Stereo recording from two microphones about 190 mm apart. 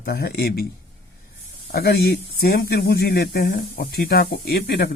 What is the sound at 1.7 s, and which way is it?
Speech, 55° left (ahead or behind).